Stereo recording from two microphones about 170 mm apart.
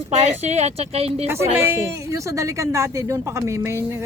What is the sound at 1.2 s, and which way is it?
A woman's voice, 15° right (ahead or behind).